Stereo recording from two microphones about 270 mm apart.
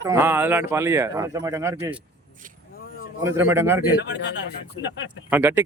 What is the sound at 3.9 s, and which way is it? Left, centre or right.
Speech, left.